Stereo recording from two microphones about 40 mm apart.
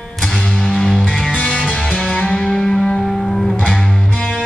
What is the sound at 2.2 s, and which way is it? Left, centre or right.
Music, centre.